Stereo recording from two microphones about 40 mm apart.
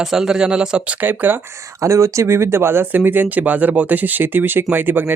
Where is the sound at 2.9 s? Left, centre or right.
Right.